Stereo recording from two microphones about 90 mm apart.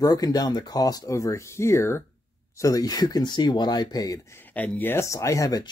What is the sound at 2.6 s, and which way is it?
Speech, 45° left (ahead or behind).